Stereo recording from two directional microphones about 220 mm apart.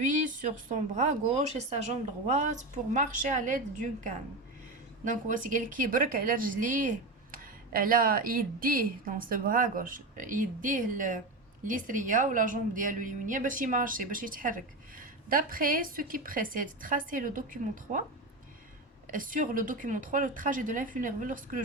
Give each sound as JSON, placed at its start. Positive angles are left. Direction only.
{"t": 0.0, "sound": "speech", "side_deg": -35}
{"t": 19.0, "sound": "speech", "side_deg": -40}